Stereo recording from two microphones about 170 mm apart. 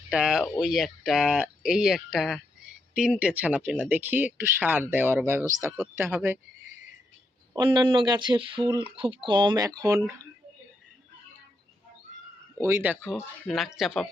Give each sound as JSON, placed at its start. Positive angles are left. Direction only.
{"t": 0.1, "sound": "speech", "side_deg": -5}
{"t": 7.5, "sound": "speech", "side_deg": -25}
{"t": 12.5, "sound": "speech", "side_deg": -15}